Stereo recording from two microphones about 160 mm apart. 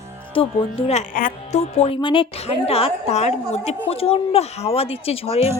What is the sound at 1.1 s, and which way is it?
Speech, 60° left (ahead or behind).